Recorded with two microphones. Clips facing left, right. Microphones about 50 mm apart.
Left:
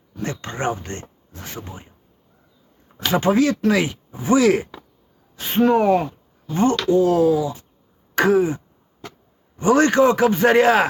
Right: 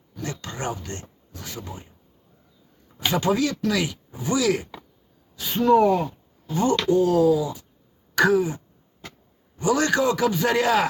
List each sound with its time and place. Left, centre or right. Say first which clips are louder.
0.2 s a sound: left 5 dB; left
3.1 s a man's voice: left 5 dB; left
8.1 s throat clearing: left 3 dB; left
9.6 s a man's voice: left 6 dB; left